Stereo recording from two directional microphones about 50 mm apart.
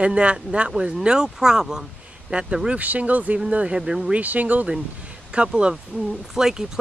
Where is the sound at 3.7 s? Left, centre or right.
Centre.